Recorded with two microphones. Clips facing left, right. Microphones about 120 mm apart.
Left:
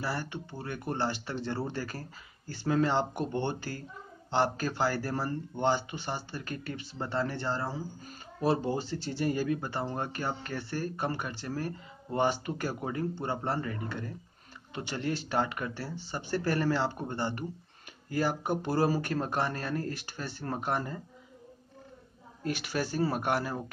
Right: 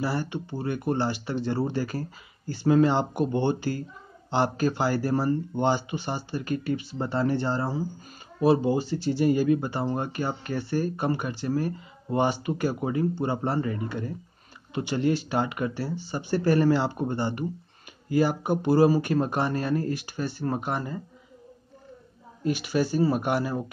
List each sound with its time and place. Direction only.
0.0 s speech: 15° right (ahead or behind)
22.4 s speech: 5° right (ahead or behind)